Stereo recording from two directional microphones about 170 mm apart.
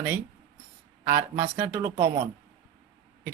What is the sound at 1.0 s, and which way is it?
Speech, 15° right (ahead or behind).